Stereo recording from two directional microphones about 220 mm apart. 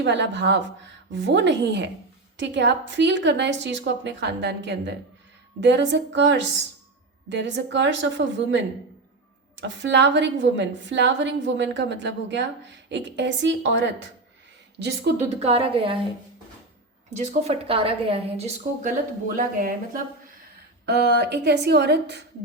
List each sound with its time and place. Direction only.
0.0 s a woman's voice: 55° right (ahead or behind)
15.2 s a woman's voice: 30° right (ahead or behind)
17.2 s a woman's voice: 30° right (ahead or behind); by 22.2 s 50° right (ahead or behind)